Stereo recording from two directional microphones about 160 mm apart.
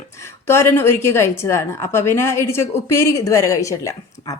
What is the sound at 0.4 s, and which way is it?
A woman's voice, 15° left (ahead or behind).